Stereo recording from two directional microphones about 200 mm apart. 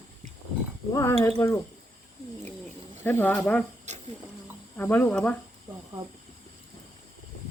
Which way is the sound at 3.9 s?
35° right (ahead or behind).